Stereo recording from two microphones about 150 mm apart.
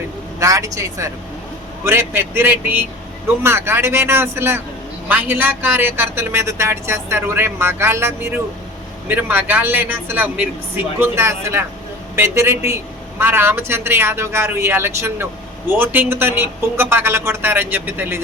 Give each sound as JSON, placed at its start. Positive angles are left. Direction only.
{"t": 0.3, "sound": "speech", "side_deg": -20}